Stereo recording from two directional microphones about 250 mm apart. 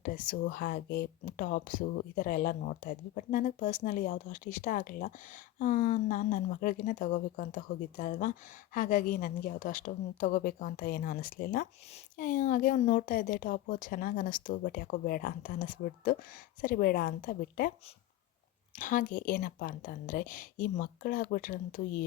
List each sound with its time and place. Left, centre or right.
0.0 s speech: left
18.8 s speech: left